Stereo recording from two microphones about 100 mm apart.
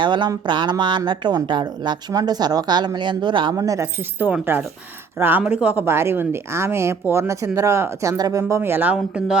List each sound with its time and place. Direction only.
0.0 s speech: 50° right (ahead or behind)
3.5 s speech: 35° right (ahead or behind)
4.2 s speech: 20° right (ahead or behind)